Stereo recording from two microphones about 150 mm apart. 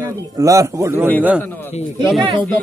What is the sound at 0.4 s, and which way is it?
Speech, 20° right (ahead or behind).